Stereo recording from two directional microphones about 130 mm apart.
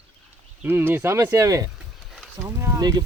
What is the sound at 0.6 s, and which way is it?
Speech, 15° right (ahead or behind).